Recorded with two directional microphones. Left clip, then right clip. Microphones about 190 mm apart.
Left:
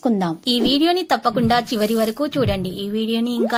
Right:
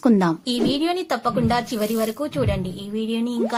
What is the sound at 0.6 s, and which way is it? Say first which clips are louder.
Speech: left 4 dB; 25° left (ahead or behind).